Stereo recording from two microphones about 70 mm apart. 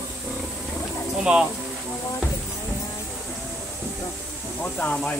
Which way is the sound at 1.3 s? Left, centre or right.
Centre.